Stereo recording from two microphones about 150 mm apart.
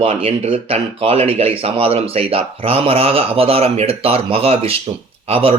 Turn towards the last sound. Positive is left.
turn(degrees=-40)  # may be behind; listen again after turning